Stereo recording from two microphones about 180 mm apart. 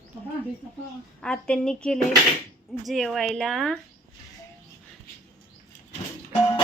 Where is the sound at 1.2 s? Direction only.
5° left (ahead or behind).